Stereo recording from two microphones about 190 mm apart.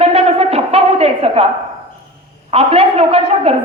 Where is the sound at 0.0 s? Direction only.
35° right (ahead or behind).